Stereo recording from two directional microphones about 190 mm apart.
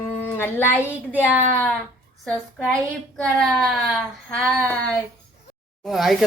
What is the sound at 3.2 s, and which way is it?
Speech, centre (ahead or behind).